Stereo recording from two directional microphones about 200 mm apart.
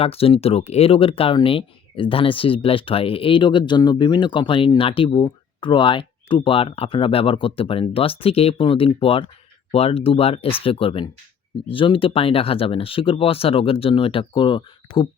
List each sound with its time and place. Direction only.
0.0 s speech: 30° left (ahead or behind)